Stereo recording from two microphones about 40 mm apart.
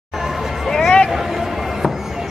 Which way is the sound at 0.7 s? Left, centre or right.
Centre.